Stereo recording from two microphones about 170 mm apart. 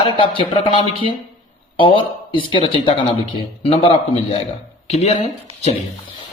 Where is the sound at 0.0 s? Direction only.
30° left (ahead or behind).